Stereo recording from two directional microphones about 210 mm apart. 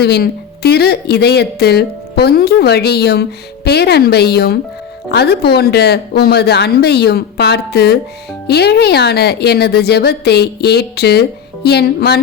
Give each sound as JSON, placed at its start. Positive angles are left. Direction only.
{"t": 0.0, "sound": "speech", "side_deg": 50}